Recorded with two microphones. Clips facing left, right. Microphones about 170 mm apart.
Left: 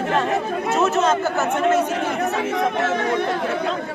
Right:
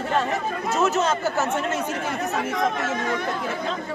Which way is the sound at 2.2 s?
65° left (ahead or behind).